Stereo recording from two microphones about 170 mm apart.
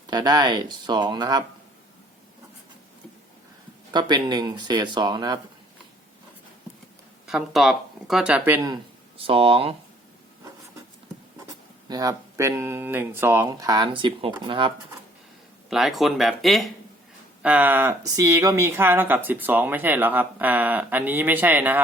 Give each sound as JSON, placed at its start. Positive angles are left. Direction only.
{"t": 0.1, "sound": "speech", "side_deg": -25}
{"t": 3.9, "sound": "speech", "side_deg": -25}
{"t": 7.3, "sound": "speech", "side_deg": 0}
{"t": 8.6, "sound": "speech", "side_deg": -30}
{"t": 11.9, "sound": "speech", "side_deg": -20}
{"t": 15.7, "sound": "speech", "side_deg": 0}